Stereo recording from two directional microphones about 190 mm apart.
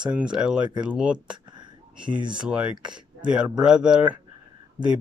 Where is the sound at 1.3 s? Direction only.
25° right (ahead or behind).